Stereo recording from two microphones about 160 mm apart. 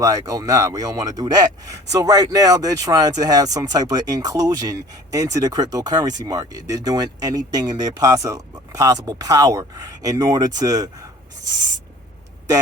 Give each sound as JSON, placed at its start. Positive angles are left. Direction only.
{"t": 0.0, "sound": "speech", "side_deg": -20}